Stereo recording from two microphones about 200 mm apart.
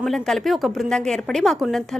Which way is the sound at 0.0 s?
Centre (ahead or behind).